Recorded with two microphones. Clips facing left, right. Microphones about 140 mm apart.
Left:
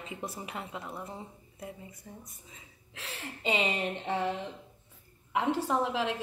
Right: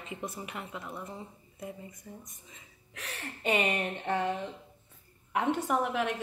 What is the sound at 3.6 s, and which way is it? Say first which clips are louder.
Speech: even; 65° right (ahead or behind).